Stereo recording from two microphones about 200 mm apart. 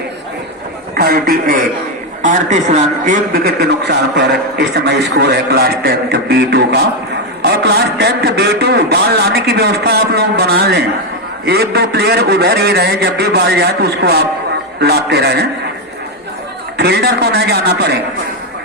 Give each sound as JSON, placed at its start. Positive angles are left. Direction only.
{"t": 0.9, "sound": "a man's voice", "side_deg": -50}
{"t": 16.7, "sound": "a man's voice", "side_deg": -55}